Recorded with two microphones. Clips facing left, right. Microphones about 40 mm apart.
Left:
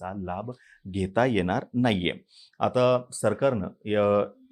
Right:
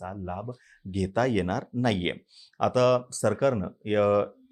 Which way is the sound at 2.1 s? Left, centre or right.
Centre.